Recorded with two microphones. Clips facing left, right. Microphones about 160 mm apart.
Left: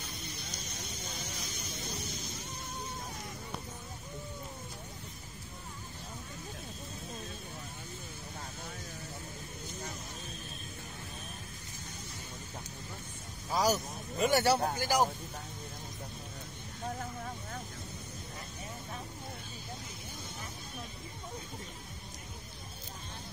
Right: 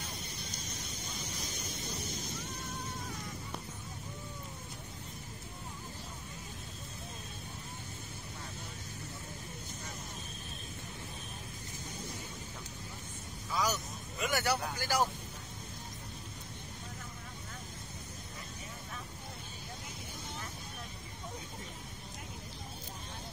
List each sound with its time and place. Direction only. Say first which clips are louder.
13.5 s vehicle: left 5 dB; 40° left (ahead or behind)
14.8 s speech: left 3 dB; 15° left (ahead or behind)